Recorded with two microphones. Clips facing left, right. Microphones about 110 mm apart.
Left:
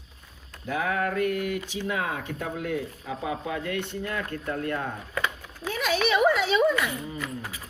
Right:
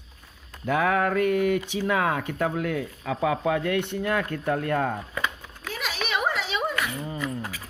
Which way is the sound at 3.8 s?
65° right (ahead or behind).